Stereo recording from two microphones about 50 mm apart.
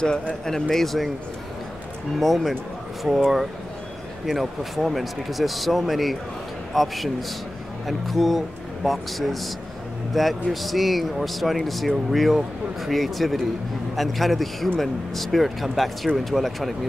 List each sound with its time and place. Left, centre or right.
0.0 s speech: centre
2.1 s speech: centre
3.1 s speech: centre
4.3 s speech: centre